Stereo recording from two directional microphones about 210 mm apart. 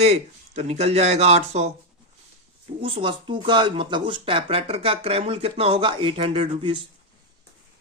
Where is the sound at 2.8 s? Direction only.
25° right (ahead or behind).